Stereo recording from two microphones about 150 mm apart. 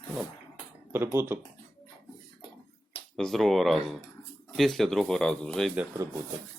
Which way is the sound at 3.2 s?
Centre (ahead or behind).